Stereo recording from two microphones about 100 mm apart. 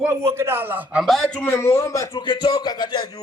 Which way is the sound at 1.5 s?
25° left (ahead or behind).